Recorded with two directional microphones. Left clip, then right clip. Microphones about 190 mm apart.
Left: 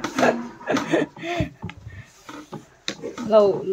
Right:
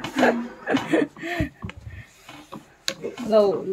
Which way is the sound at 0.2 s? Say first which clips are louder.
Even; centre (ahead or behind).